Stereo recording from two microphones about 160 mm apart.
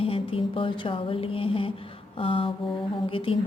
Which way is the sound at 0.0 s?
35° left (ahead or behind).